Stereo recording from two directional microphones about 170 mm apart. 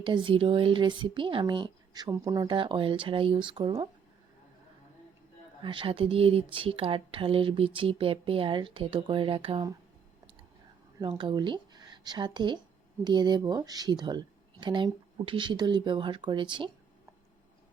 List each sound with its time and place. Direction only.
0.0 s speech: 30° right (ahead or behind)
5.6 s speech: 30° right (ahead or behind)
11.0 s a woman's voice: 30° right (ahead or behind)